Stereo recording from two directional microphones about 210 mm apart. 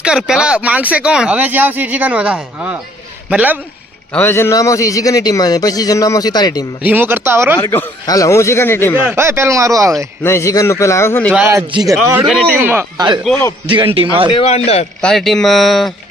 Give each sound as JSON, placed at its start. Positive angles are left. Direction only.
{"t": 0.0, "sound": "speech", "side_deg": -5}
{"t": 4.1, "sound": "a man's voice", "side_deg": 10}
{"t": 6.8, "sound": "speech", "side_deg": -10}
{"t": 7.6, "sound": "a man's voice", "side_deg": 10}
{"t": 9.0, "sound": "speech", "side_deg": -10}
{"t": 10.2, "sound": "a man's voice", "side_deg": 15}
{"t": 11.3, "sound": "speech", "side_deg": -10}
{"t": 13.3, "sound": "speech", "side_deg": 0}
{"t": 13.9, "sound": "a man's voice", "side_deg": -25}
{"t": 14.3, "sound": "speech", "side_deg": 30}
{"t": 15.0, "sound": "speech", "side_deg": 0}